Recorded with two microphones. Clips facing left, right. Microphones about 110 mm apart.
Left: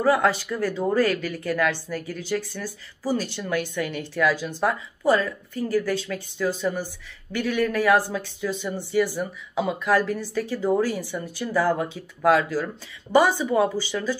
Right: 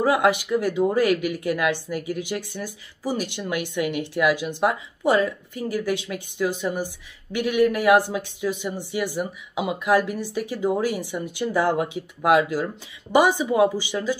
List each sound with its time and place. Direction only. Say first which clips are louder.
0.0 s speech: right 1 dB; 15° right (ahead or behind)